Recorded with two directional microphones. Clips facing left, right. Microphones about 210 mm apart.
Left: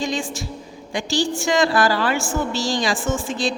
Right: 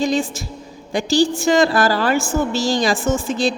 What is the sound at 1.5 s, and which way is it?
A woman's voice, 40° right (ahead or behind).